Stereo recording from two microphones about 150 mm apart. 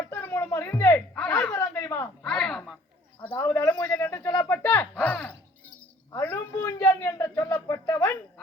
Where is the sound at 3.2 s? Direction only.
15° left (ahead or behind).